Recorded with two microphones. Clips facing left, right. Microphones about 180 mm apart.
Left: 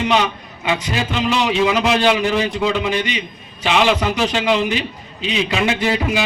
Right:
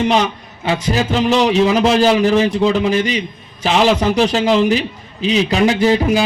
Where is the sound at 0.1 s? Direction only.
35° right (ahead or behind).